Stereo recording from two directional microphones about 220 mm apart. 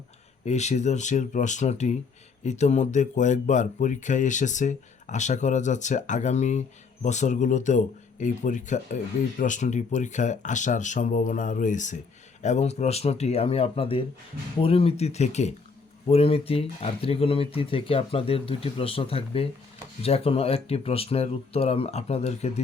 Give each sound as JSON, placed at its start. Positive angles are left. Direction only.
{"t": 0.4, "sound": "speech", "side_deg": 30}